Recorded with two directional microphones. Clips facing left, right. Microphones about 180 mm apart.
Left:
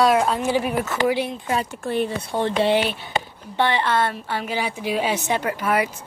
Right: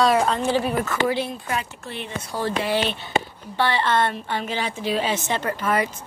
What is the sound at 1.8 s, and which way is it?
Speech, 40° left (ahead or behind).